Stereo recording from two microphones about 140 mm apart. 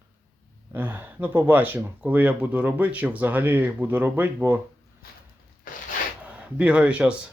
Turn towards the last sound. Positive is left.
turn(degrees=-10)  # may be behind; listen again after turning